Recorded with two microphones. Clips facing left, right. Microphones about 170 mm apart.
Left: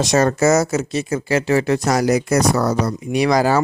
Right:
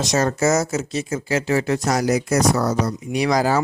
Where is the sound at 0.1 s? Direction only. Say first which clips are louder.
Left 3 dB; 60° left (ahead or behind).